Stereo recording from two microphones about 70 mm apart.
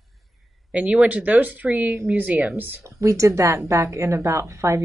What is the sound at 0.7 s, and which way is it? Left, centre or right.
Speech, centre.